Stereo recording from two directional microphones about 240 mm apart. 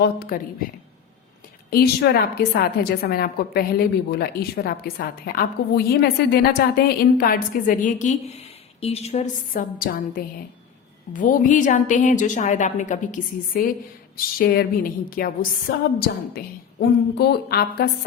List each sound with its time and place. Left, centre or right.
0.0 s a woman's voice: left
1.7 s a woman's voice: left